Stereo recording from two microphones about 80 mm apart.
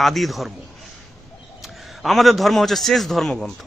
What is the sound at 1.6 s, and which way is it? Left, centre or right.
A man's voice, centre.